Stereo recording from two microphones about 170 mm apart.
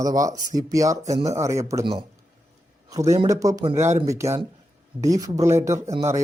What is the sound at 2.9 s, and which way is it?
Speech, 20° right (ahead or behind).